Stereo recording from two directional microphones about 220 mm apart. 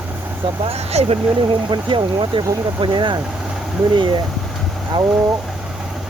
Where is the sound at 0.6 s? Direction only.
25° right (ahead or behind).